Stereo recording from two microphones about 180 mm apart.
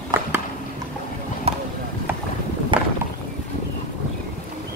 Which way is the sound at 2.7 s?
25° right (ahead or behind).